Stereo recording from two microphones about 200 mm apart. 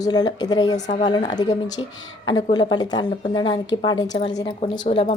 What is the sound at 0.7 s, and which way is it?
Speech, 35° left (ahead or behind).